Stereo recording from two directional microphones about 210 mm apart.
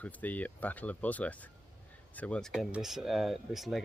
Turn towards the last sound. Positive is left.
turn(degrees=0)  # may be behind; listen again after turning